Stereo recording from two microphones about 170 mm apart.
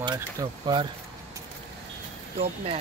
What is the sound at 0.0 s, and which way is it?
Speech, 25° right (ahead or behind).